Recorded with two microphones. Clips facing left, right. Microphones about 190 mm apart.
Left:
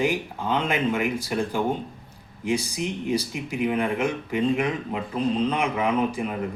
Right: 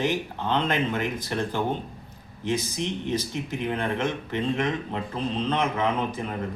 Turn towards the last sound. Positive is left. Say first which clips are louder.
# left 3 dB
turn(degrees=10)  # may be behind; listen again after turning